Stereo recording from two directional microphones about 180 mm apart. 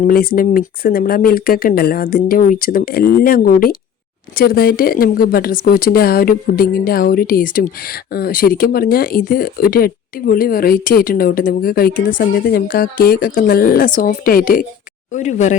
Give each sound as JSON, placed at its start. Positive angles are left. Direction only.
{"t": 0.1, "sound": "speech", "side_deg": 55}
{"t": 15.1, "sound": "speech", "side_deg": 40}